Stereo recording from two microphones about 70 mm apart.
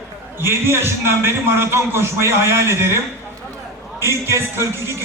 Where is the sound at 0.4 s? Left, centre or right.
Right.